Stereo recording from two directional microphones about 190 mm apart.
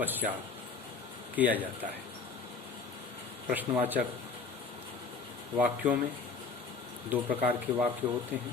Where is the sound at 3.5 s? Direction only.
10° right (ahead or behind).